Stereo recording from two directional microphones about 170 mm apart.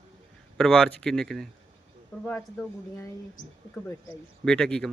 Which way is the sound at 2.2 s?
15° left (ahead or behind).